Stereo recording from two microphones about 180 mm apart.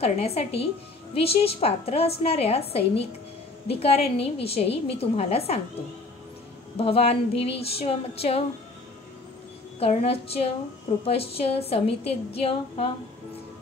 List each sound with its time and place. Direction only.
0.0 s a woman's voice: 35° left (ahead or behind)
3.8 s a woman's voice: 35° left (ahead or behind)
6.8 s a woman's voice: 35° left (ahead or behind)
9.8 s a woman's voice: 35° left (ahead or behind)